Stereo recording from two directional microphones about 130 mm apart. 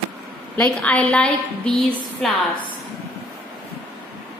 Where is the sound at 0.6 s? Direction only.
10° left (ahead or behind).